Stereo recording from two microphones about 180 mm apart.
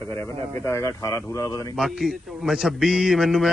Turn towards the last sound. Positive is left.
turn(degrees=0)  # may be behind; listen again after turning